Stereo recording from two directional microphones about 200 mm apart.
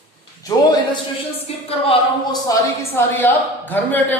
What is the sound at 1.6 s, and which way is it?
Speech, 30° left (ahead or behind).